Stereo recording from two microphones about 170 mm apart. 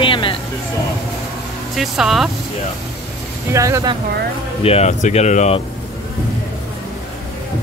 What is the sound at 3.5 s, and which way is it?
Speech, 15° right (ahead or behind).